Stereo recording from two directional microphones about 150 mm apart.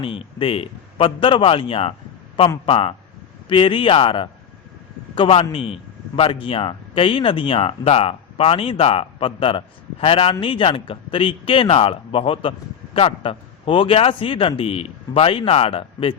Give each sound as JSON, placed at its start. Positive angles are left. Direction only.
{"t": 0.0, "sound": "speech", "side_deg": 40}